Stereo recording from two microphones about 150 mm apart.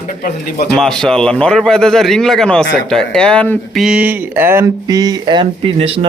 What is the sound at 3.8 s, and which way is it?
Speech, 10° right (ahead or behind).